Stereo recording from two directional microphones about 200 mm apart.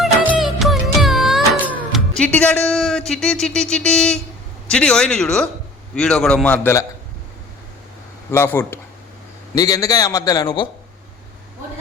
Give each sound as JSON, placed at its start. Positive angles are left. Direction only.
{"t": 0.0, "sound": "music", "side_deg": -5}
{"t": 2.1, "sound": "speech", "side_deg": 5}
{"t": 8.3, "sound": "a man's voice", "side_deg": 10}